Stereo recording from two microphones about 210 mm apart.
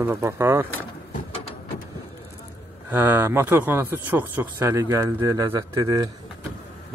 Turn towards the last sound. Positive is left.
turn(degrees=-15)  # may be behind; listen again after turning